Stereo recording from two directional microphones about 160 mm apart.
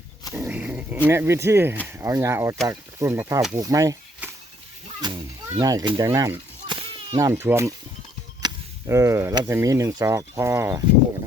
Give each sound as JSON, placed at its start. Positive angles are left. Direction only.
{"t": 0.3, "sound": "dog", "side_deg": -10}
{"t": 1.0, "sound": "speech", "side_deg": -15}
{"t": 4.2, "sound": "a sound", "side_deg": -10}
{"t": 5.0, "sound": "speech", "side_deg": -25}
{"t": 6.1, "sound": "a sound", "side_deg": -20}
{"t": 6.7, "sound": "whip", "side_deg": -30}
{"t": 7.2, "sound": "speech", "side_deg": -15}